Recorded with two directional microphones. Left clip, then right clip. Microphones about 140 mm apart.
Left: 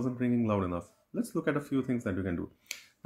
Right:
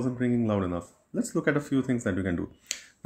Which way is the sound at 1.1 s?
10° right (ahead or behind).